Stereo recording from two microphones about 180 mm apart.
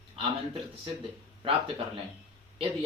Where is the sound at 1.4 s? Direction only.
30° right (ahead or behind).